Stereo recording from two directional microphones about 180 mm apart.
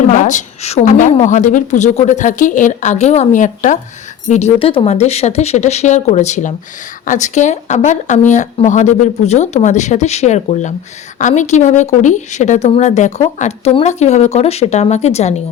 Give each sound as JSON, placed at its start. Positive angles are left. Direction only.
{"t": 0.1, "sound": "a woman's voice", "side_deg": 45}